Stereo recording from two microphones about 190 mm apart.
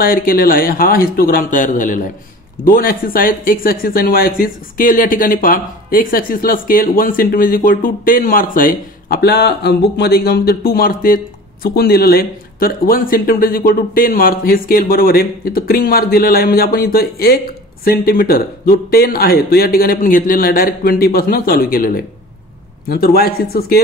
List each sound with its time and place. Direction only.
0.0 s speech: 50° left (ahead or behind)